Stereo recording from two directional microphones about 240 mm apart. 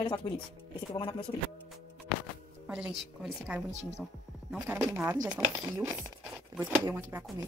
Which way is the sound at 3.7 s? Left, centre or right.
Right.